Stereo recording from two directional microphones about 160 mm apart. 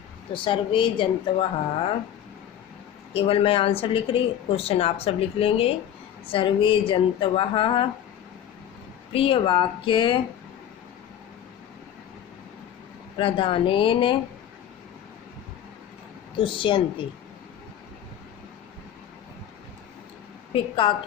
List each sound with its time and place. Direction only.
0.3 s speech: 30° left (ahead or behind)
3.1 s speech: 35° left (ahead or behind)
9.1 s speech: 35° left (ahead or behind)
13.1 s speech: 35° left (ahead or behind)
16.4 s speech: 30° left (ahead or behind)
20.5 s speech: 30° left (ahead or behind)